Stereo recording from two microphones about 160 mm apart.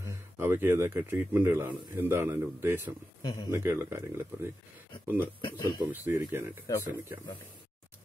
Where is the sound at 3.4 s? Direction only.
15° right (ahead or behind).